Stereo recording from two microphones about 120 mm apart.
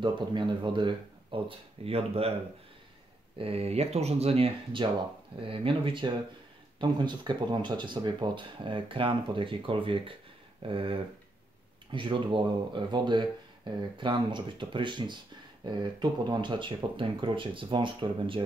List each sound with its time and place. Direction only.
0.0 s speech: 40° right (ahead or behind)
1.9 s speech: 55° right (ahead or behind)
3.3 s speech: 55° right (ahead or behind)